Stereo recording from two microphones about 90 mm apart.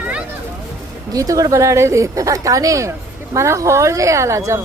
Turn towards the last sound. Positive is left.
turn(degrees=-35)  # may be behind; listen again after turning